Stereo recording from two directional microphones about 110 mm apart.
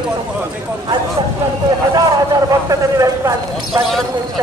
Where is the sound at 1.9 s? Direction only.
30° right (ahead or behind).